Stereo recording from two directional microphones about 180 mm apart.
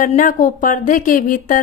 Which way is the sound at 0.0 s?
45° left (ahead or behind).